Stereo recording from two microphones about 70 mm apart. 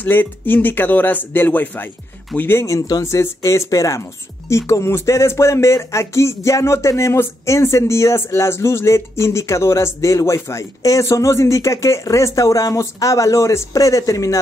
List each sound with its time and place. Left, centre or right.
0.0 s speech: left
2.6 s speech: left